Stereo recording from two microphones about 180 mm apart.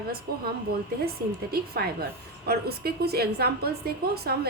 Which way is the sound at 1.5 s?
60° right (ahead or behind).